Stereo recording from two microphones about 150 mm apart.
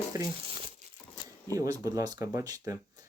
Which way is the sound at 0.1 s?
25° right (ahead or behind).